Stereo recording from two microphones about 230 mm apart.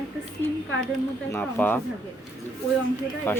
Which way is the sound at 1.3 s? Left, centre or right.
Centre.